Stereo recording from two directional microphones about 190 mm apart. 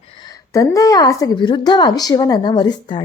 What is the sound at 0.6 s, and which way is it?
Speech, 15° left (ahead or behind).